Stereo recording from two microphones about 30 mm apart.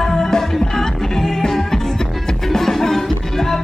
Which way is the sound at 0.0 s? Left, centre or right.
Centre.